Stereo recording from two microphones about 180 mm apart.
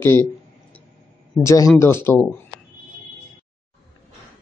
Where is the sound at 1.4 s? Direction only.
15° left (ahead or behind).